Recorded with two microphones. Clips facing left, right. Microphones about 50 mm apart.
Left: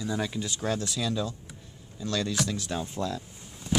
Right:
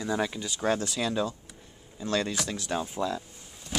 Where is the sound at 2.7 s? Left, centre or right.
Centre.